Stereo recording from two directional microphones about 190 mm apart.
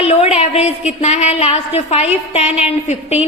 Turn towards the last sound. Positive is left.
turn(degrees=35)  # may be behind; listen again after turning